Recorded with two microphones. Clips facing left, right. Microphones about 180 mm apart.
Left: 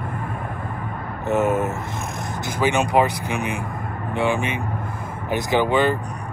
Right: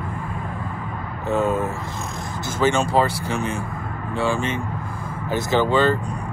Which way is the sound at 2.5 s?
15° left (ahead or behind).